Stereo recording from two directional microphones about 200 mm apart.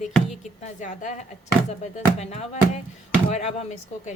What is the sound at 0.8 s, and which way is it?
Speech, 40° left (ahead or behind).